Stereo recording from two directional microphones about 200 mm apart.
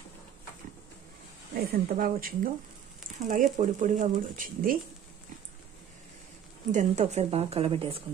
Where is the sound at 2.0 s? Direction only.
45° right (ahead or behind).